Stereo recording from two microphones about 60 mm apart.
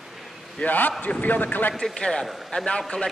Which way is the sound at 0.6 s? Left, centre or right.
Left.